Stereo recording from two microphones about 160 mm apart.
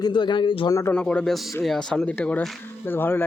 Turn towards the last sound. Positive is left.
turn(degrees=15)  # may be behind; listen again after turning